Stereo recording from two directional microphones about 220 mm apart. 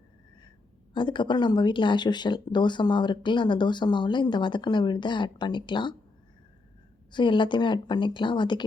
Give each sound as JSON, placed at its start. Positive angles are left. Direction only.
{"t": 0.9, "sound": "speech", "side_deg": 20}
{"t": 7.1, "sound": "speech", "side_deg": 20}